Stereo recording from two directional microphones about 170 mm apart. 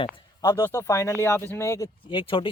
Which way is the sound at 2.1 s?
30° left (ahead or behind).